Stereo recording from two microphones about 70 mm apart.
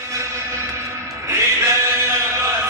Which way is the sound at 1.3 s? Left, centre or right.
Right.